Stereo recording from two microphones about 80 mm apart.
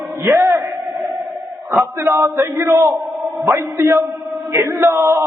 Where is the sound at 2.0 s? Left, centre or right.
Right.